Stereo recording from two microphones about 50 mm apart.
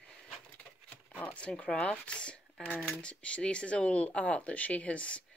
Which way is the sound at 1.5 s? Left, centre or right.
Centre.